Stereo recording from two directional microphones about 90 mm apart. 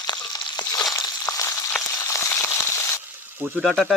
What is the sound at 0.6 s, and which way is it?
Crushing, 50° left (ahead or behind).